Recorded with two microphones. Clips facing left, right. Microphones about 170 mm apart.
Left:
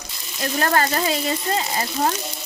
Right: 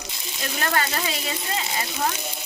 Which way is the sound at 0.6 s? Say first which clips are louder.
Left 5 dB; 40° left (ahead or behind).